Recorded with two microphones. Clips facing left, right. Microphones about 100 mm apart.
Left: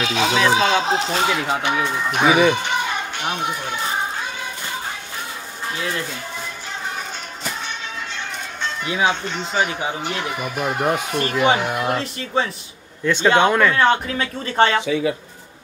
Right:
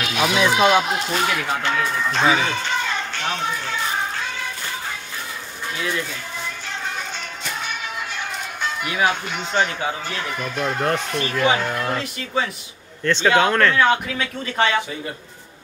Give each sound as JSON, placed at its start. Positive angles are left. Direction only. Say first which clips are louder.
{"t": 0.0, "sound": "speech", "louder": "left 1 dB", "side_deg": 25}
{"t": 8.8, "sound": "speech", "louder": "left 1 dB", "side_deg": 25}
{"t": 9.1, "sound": "speech", "louder": "even", "side_deg": -5}
{"t": 9.8, "sound": "speech", "louder": "left 1 dB", "side_deg": 20}
{"t": 11.1, "sound": "speech", "louder": "left 3 dB", "side_deg": 20}
{"t": 13.0, "sound": "speech", "louder": "left 1 dB", "side_deg": 10}
{"t": 13.7, "sound": "speech", "louder": "left 1 dB", "side_deg": 35}